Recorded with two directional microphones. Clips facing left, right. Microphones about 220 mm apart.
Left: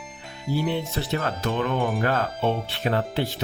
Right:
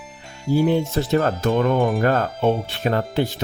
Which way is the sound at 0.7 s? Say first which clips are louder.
Right 7 dB; 45° right (ahead or behind).